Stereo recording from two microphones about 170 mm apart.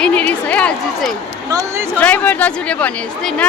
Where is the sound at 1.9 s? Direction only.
10° left (ahead or behind).